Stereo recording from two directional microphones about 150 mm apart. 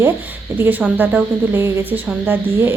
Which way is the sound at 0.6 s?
10° right (ahead or behind).